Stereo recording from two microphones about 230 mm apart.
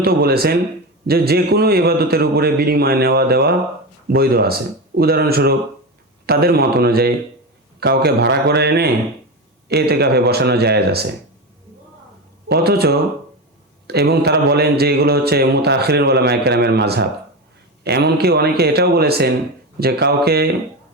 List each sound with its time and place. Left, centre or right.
0.0 s speech: right
12.5 s speech: right